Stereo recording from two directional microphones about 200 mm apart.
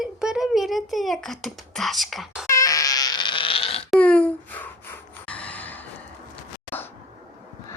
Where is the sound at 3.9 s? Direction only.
5° left (ahead or behind).